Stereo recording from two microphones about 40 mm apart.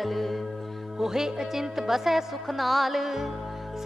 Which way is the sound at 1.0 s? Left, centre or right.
Centre.